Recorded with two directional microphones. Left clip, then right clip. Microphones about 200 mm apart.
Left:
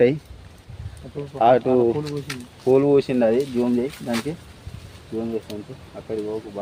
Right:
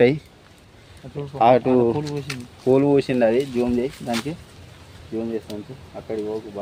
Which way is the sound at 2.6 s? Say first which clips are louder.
Left 1 dB; 25° right (ahead or behind).